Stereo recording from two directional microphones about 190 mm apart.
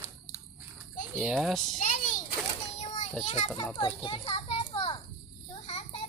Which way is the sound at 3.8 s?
25° left (ahead or behind).